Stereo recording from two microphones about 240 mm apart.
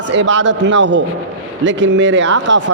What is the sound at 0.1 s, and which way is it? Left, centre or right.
A man's voice, right.